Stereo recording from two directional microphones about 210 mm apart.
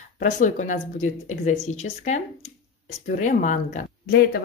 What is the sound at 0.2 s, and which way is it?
Speech, 35° left (ahead or behind).